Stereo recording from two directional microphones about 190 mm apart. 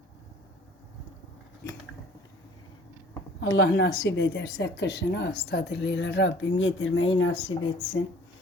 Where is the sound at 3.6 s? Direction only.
60° left (ahead or behind); by 7.0 s 90° left.